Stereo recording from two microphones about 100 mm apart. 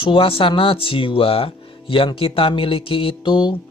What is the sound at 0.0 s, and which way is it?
Speech, 60° left (ahead or behind).